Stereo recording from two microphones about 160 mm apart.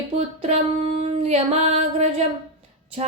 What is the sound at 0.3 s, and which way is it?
Mantra, 40° right (ahead or behind).